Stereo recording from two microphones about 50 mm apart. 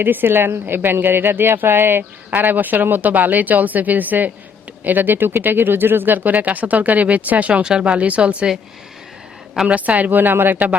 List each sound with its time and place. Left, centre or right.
0.0 s speech: right
7.6 s speech: centre
9.6 s speech: right